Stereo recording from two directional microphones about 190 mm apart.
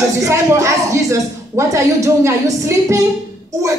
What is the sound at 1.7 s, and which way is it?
A woman's voice, 15° right (ahead or behind).